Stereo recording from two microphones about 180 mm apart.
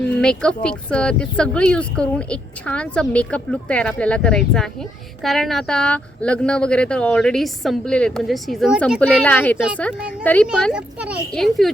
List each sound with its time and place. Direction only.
0.2 s speech: 5° left (ahead or behind)
9.0 s a woman's voice: 10° left (ahead or behind)
10.6 s speech: 5° right (ahead or behind)